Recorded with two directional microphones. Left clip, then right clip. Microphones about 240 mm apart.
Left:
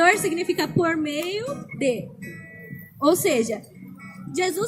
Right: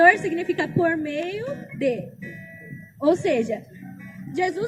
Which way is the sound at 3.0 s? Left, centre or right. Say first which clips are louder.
Left 1 dB; centre.